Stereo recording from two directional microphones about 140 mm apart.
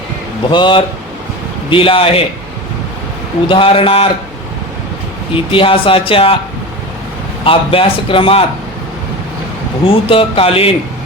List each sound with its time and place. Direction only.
0.5 s speech: 35° left (ahead or behind)
3.5 s speech: 40° left (ahead or behind)
5.3 s speech: 40° left (ahead or behind)
7.4 s speech: 40° left (ahead or behind)
9.8 s speech: 40° left (ahead or behind)